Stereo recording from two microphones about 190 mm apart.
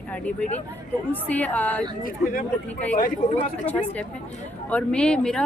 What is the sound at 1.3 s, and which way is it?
Speech, 10° left (ahead or behind).